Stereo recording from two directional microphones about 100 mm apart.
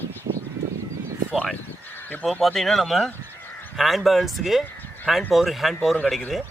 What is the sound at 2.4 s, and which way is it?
Speech, centre (ahead or behind).